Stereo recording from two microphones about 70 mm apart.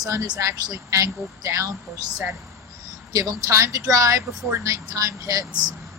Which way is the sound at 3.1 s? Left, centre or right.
Right.